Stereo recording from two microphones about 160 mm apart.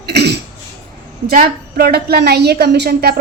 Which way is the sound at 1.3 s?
70° right (ahead or behind).